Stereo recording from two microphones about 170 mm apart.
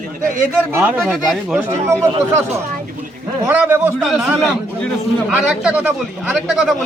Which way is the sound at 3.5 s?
10° right (ahead or behind).